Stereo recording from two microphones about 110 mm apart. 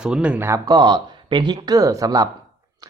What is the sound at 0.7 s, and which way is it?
Speech, 40° right (ahead or behind).